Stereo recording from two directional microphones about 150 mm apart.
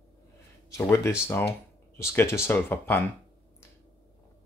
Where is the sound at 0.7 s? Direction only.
20° left (ahead or behind).